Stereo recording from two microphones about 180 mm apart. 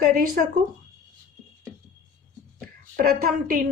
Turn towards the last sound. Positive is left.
turn(degrees=-50)  # may be behind; listen again after turning